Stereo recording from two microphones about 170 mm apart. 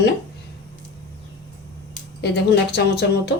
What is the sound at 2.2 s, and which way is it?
Speech, 75° left (ahead or behind).